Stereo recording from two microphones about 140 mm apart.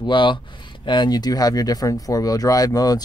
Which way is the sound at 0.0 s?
35° left (ahead or behind).